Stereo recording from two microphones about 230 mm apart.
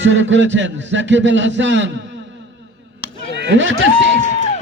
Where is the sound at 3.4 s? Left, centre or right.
Right.